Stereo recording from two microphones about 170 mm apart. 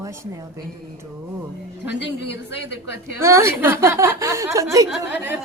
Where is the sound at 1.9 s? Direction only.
90° left.